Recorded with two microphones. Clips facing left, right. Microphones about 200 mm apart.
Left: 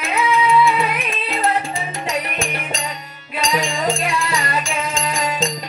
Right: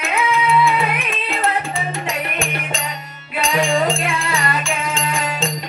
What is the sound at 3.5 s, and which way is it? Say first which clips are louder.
Music: right 4 dB; 40° left (ahead or behind).